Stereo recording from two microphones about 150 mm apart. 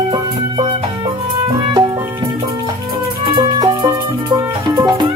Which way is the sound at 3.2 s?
30° right (ahead or behind).